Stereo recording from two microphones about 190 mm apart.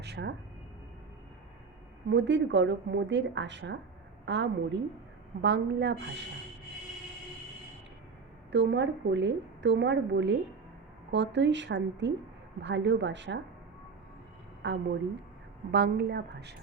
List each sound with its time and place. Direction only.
0.0 s a woman's voice: 65° right (ahead or behind)
2.0 s a woman's voice: 65° right (ahead or behind)
8.5 s a woman's voice: 70° right (ahead or behind)
14.6 s a woman's voice: 65° right (ahead or behind)